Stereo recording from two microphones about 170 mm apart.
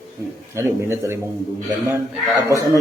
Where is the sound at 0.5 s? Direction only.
15° right (ahead or behind).